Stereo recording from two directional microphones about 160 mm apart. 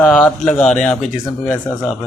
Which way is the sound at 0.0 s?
5° left (ahead or behind).